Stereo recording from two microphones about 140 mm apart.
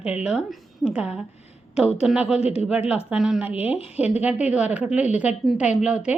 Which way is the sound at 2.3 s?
50° left (ahead or behind).